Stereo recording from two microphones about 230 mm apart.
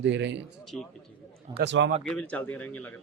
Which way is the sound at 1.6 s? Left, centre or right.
Right.